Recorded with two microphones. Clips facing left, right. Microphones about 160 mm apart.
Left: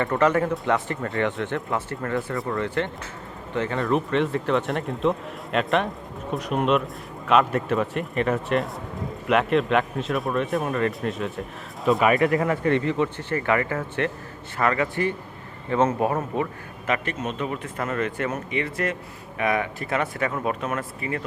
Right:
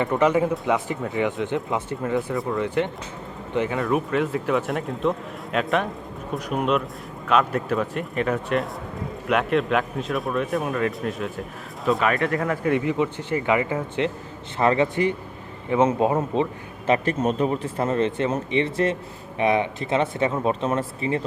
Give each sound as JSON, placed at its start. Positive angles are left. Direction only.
{"t": 0.0, "sound": "speech", "side_deg": -15}
{"t": 2.3, "sound": "speech", "side_deg": 0}
{"t": 2.6, "sound": "speech", "side_deg": -15}
{"t": 3.8, "sound": "speech", "side_deg": -5}
{"t": 12.6, "sound": "speech", "side_deg": -10}
{"t": 14.6, "sound": "a man's voice", "side_deg": -25}